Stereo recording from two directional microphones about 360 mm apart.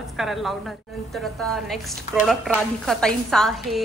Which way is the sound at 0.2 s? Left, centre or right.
Centre.